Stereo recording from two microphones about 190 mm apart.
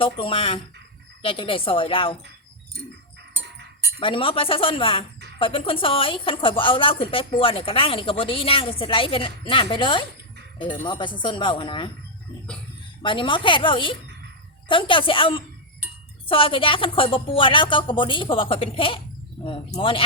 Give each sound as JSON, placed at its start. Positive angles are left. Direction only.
{"t": 0.0, "sound": "a woman's voice", "side_deg": 30}
{"t": 4.0, "sound": "a woman's voice", "side_deg": 30}
{"t": 13.0, "sound": "a woman's voice", "side_deg": 25}